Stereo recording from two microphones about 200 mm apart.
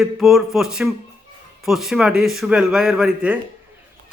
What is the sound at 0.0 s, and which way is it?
A man's voice, centre (ahead or behind).